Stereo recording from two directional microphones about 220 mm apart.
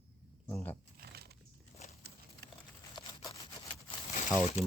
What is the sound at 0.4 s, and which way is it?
Speech, 10° left (ahead or behind).